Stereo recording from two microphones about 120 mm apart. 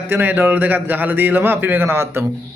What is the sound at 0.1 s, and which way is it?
A man's voice, 15° right (ahead or behind).